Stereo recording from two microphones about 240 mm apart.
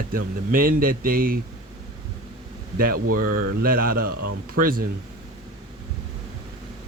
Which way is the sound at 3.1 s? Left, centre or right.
Right.